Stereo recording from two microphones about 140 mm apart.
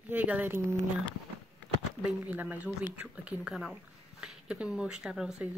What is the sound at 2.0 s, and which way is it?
Speech, 10° right (ahead or behind).